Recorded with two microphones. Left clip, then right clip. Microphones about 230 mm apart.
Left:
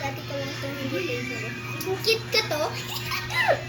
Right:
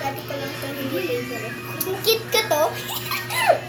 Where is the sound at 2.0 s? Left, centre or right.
Right.